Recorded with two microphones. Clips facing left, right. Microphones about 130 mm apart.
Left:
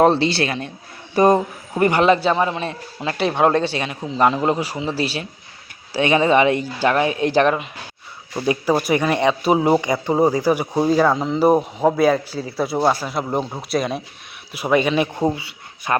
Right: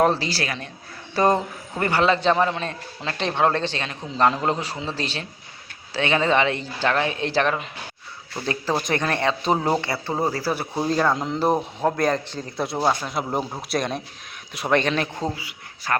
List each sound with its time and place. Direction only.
0.0 s a man's voice: 25° left (ahead or behind)
2.2 s speech: 5° left (ahead or behind)
15.4 s speech: 25° left (ahead or behind)